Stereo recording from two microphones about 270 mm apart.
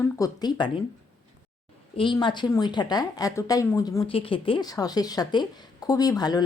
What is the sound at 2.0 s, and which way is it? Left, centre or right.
Speech, centre.